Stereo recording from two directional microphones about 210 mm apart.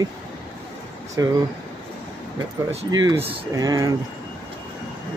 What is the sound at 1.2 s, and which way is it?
Speech, 15° right (ahead or behind).